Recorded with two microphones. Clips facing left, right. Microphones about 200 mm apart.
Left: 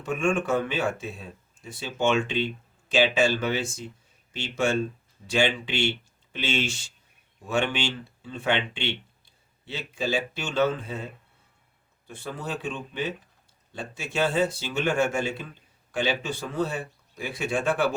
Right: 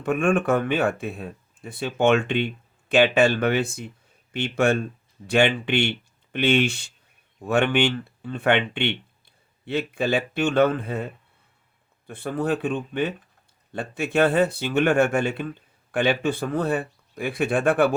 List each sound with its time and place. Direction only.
0.0 s speech: 60° right (ahead or behind)